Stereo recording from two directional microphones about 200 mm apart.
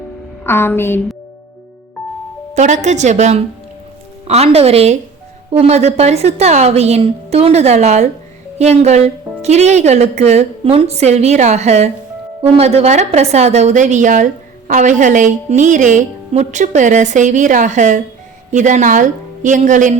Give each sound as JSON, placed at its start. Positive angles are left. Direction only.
{"t": 0.4, "sound": "a woman's voice", "side_deg": 10}
{"t": 2.6, "sound": "speech", "side_deg": -35}